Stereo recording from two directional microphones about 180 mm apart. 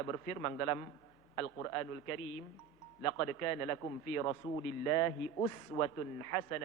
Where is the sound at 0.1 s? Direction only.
15° left (ahead or behind).